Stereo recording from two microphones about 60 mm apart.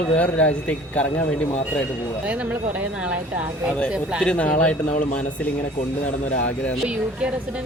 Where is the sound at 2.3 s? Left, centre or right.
Right.